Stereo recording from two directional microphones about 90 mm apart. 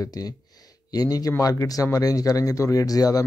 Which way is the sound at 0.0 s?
45° left (ahead or behind).